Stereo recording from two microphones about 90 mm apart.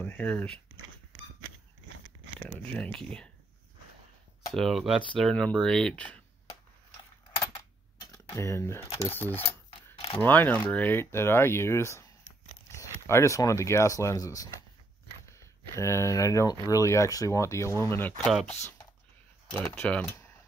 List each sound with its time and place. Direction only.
0.0 s speech: 20° left (ahead or behind)
2.3 s speech: 15° left (ahead or behind)
4.6 s speech: centre (ahead or behind)
5.3 s speech: 10° left (ahead or behind)
8.1 s speech: 35° left (ahead or behind)
18.1 s speech: centre (ahead or behind)
19.6 s speech: 15° left (ahead or behind)